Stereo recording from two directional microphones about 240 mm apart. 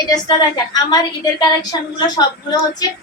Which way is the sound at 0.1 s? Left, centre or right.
Centre.